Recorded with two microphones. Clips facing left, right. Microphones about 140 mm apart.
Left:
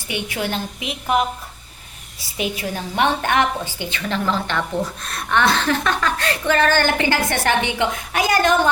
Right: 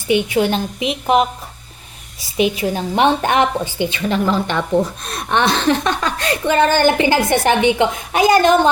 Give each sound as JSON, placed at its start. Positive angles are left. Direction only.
{"t": 0.1, "sound": "speech", "side_deg": -20}
{"t": 2.4, "sound": "speech", "side_deg": -20}